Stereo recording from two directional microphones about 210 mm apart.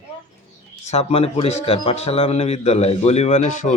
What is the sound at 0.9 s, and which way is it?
A man's voice, 30° left (ahead or behind).